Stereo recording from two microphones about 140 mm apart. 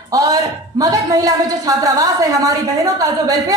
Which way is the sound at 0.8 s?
25° right (ahead or behind).